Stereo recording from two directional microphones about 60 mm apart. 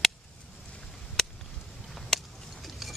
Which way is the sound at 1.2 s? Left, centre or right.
Centre.